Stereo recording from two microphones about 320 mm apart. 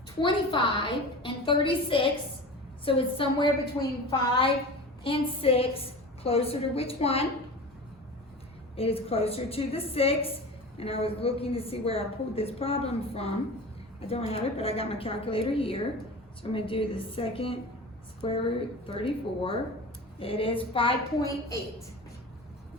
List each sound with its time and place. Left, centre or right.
0.2 s a woman's voice: centre
8.7 s a woman's voice: centre